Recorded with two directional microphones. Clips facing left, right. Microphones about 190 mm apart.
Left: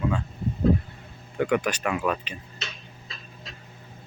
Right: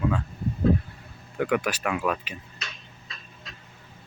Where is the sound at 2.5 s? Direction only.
30° left (ahead or behind).